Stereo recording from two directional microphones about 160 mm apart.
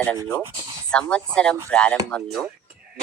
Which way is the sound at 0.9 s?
5° left (ahead or behind).